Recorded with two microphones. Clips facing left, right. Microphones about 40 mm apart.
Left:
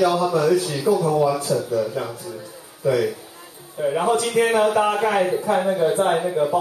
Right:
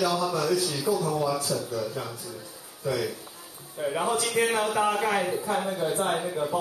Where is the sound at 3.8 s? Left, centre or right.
Centre.